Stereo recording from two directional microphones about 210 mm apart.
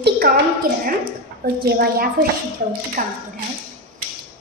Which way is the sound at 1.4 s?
45° right (ahead or behind).